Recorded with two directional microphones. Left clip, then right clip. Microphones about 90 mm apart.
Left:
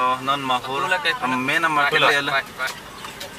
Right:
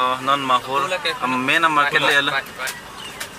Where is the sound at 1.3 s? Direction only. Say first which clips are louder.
Right 6 dB; 10° right (ahead or behind).